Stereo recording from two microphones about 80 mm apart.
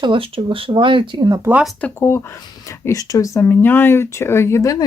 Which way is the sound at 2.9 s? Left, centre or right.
Left.